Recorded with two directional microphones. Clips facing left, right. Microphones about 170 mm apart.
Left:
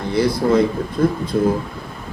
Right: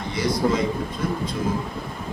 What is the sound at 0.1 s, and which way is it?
Speech, 60° left (ahead or behind).